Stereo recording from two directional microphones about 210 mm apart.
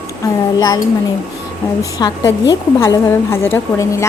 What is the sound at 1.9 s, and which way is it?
A woman's voice, 15° left (ahead or behind).